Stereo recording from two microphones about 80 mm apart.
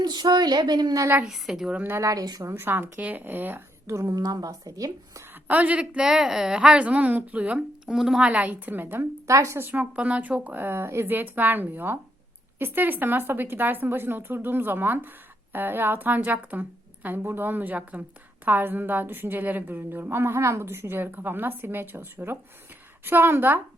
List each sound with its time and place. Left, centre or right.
0.0 s a woman's voice: right
1.2 s a woman's voice: centre
2.0 s speech: right
2.4 s a woman's voice: right
3.8 s speech: right
4.2 s speech: right
5.5 s a woman's voice: centre
7.9 s a woman's voice: centre
8.3 s a woman's voice: centre
9.2 s speech: right
9.9 s a woman's voice: centre